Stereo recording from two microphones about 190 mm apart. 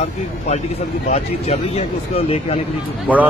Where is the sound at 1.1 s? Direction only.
35° left (ahead or behind).